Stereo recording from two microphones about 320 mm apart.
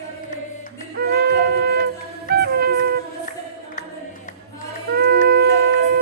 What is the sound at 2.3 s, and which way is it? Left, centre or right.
Music, right.